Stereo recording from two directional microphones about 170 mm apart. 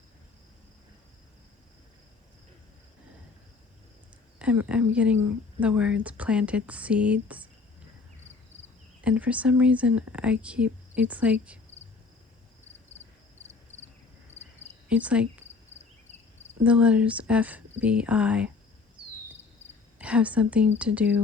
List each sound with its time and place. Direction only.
4.4 s speech: 5° right (ahead or behind)
9.0 s speech: 10° right (ahead or behind)
13.4 s a sound: 40° left (ahead or behind)
14.8 s speech: 5° right (ahead or behind)
16.6 s speech: 5° right (ahead or behind)
20.0 s speech: 5° right (ahead or behind)